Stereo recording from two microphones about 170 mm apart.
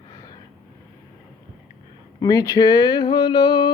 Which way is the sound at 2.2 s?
20° left (ahead or behind).